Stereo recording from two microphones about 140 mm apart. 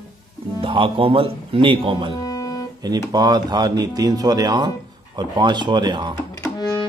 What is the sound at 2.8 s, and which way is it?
Speech, 30° right (ahead or behind).